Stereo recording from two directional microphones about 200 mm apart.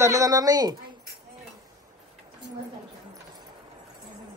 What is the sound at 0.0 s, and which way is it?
Speech, 15° right (ahead or behind).